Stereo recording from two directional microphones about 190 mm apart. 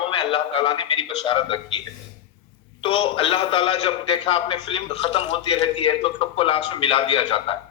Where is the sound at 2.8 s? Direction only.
30° left (ahead or behind).